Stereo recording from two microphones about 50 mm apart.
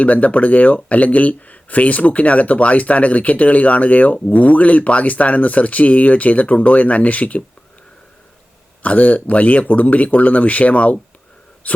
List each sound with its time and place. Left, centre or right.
0.0 s speech: left
8.8 s speech: left